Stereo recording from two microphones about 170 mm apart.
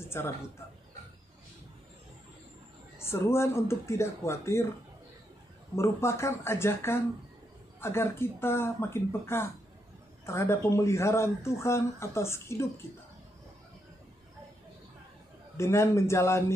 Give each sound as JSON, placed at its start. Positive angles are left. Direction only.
{"t": 0.0, "sound": "a sound", "side_deg": 15}
{"t": 3.0, "sound": "speech", "side_deg": 15}
{"t": 5.8, "sound": "speech", "side_deg": 15}
{"t": 15.5, "sound": "speech", "side_deg": 15}